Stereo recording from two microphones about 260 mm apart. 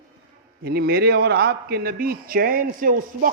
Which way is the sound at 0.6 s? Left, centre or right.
Right.